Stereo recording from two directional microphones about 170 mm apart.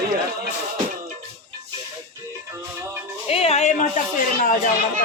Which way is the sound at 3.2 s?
35° left (ahead or behind).